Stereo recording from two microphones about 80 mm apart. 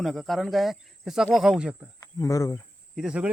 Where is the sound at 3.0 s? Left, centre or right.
Centre.